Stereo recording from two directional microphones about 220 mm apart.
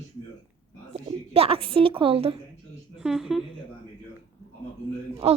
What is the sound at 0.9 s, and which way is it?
A woman's voice, 25° right (ahead or behind).